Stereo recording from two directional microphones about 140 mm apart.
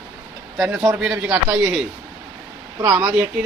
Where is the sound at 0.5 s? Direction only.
5° right (ahead or behind).